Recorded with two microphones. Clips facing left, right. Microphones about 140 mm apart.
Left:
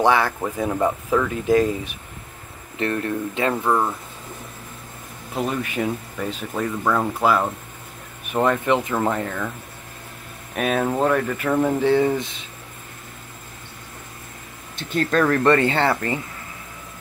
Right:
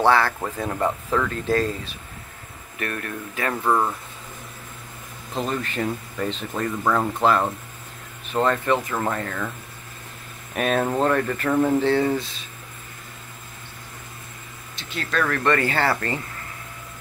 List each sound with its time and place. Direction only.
0.0 s speech: 15° left (ahead or behind)
2.8 s speech: 25° left (ahead or behind)
3.6 s speech: 5° left (ahead or behind)
5.3 s speech: 10° left (ahead or behind)
10.5 s speech: centre (ahead or behind)
14.8 s speech: 50° left (ahead or behind)
15.0 s speech: 30° left (ahead or behind)